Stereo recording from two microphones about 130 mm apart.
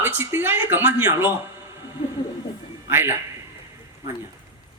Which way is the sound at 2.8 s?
20° right (ahead or behind).